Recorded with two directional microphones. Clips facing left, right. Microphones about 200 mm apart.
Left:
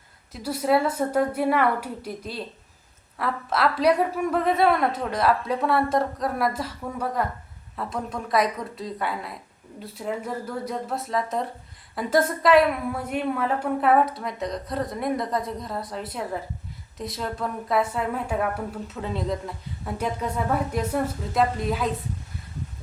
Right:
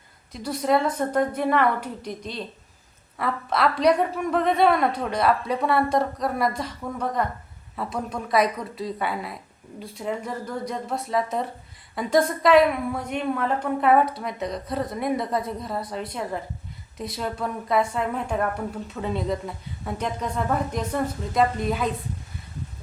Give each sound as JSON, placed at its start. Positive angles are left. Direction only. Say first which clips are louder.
{"t": 0.3, "sound": "a woman's voice", "louder": "even", "side_deg": 5}